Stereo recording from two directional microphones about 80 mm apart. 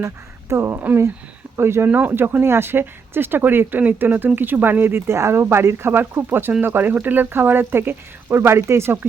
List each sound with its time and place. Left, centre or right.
0.0 s speech: right